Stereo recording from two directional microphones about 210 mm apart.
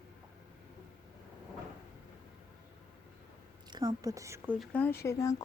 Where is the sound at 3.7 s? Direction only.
20° right (ahead or behind).